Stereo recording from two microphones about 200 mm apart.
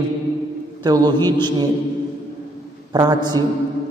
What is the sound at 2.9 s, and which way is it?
Speech, 20° right (ahead or behind).